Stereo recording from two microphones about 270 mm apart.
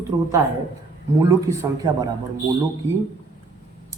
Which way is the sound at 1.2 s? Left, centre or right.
Centre.